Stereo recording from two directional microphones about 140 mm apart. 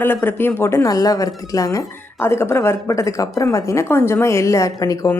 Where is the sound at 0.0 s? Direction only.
15° left (ahead or behind).